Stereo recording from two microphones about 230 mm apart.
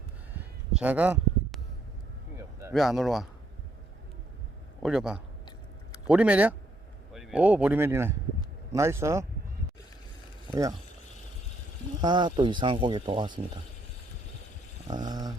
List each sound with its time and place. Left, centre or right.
0.3 s a sound: centre
2.7 s speech: centre
4.8 s speech: centre
10.5 s speech: centre
11.9 s speech: centre
14.8 s a sound: centre